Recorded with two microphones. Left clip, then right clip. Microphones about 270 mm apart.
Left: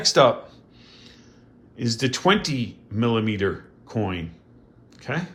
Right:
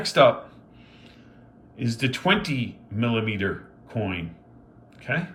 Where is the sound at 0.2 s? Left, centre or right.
Left.